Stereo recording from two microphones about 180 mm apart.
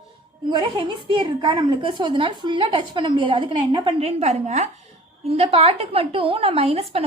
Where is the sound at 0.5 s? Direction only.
25° right (ahead or behind).